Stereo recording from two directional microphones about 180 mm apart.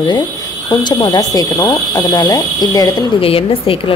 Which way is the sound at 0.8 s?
20° left (ahead or behind).